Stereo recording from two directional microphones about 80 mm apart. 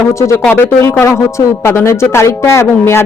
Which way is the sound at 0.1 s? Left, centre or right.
Left.